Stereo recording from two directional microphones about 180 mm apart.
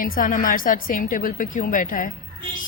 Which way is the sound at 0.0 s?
50° left (ahead or behind).